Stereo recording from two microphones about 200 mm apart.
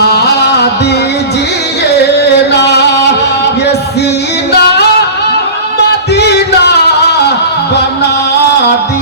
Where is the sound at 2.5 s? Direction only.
60° left (ahead or behind).